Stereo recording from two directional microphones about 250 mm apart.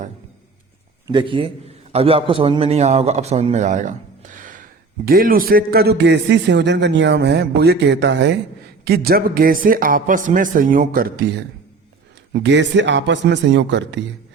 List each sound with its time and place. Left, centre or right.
1.0 s a man's voice: centre
4.4 s a sound: right
5.0 s a man's voice: right
12.3 s a man's voice: right